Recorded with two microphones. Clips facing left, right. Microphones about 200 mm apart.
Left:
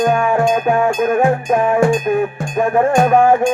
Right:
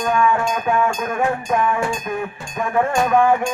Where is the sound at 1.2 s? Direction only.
35° left (ahead or behind).